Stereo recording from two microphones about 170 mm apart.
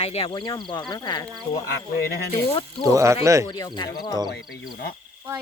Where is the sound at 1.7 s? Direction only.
65° left (ahead or behind).